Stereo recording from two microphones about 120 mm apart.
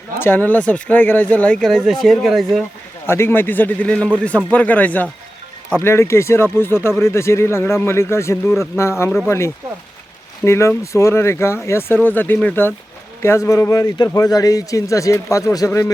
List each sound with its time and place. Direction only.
0.2 s speech: 15° left (ahead or behind); by 2.6 s centre (ahead or behind)
3.1 s speech: 20° left (ahead or behind)
10.4 s speech: 20° left (ahead or behind)
13.2 s speech: 25° left (ahead or behind)